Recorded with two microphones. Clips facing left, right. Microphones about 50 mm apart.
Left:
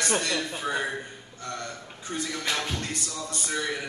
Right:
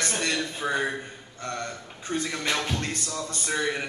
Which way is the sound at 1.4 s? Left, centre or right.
Right.